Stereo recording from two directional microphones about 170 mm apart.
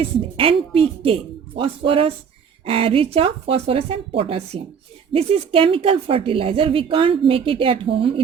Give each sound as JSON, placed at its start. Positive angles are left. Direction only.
{"t": 0.0, "sound": "speech", "side_deg": -30}